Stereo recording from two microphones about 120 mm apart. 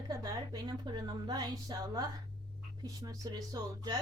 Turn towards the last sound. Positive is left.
turn(degrees=-30)  # may be behind; listen again after turning